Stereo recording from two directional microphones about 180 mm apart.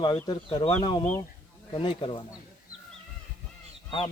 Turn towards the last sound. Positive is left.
turn(degrees=30)  # may be behind; listen again after turning